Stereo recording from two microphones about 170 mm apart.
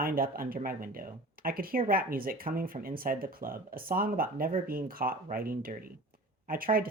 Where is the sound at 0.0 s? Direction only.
60° right (ahead or behind).